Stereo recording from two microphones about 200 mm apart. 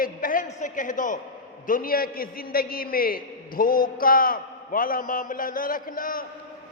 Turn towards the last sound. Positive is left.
turn(degrees=45)  # may be behind; listen again after turning